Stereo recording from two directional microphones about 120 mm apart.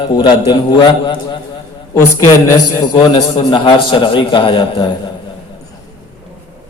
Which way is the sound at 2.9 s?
40° left (ahead or behind).